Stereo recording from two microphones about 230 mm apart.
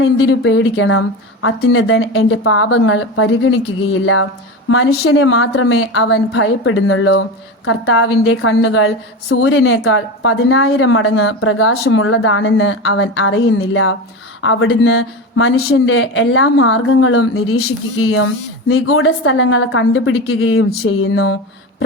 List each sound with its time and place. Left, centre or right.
0.0 s a woman's voice: left
15.5 s a man's voice: left
15.9 s a woman's voice: left